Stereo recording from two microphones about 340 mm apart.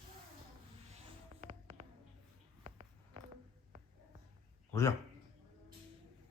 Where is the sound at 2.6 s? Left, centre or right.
Centre.